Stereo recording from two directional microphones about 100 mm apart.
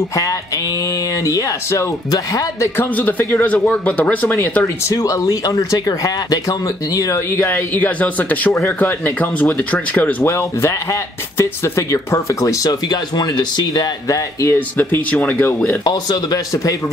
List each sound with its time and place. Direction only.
1.2 s speech: 30° left (ahead or behind)
2.8 s speech: 20° left (ahead or behind)
4.9 s speech: 35° left (ahead or behind)
7.3 s speech: 20° left (ahead or behind); by 13.8 s 45° left (ahead or behind)
14.0 s speech: 30° left (ahead or behind)
14.8 s speech: 20° left (ahead or behind)
15.8 s speech: 40° left (ahead or behind)